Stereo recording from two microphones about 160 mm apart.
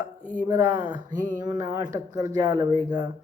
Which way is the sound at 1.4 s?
25° right (ahead or behind).